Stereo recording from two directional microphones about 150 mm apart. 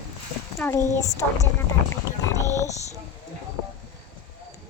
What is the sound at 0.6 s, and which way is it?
Speech, 15° left (ahead or behind).